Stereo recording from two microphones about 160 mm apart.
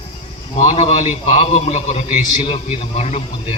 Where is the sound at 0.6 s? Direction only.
40° left (ahead or behind).